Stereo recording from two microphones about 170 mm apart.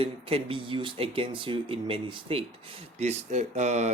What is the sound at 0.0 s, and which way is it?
Speech, 35° right (ahead or behind).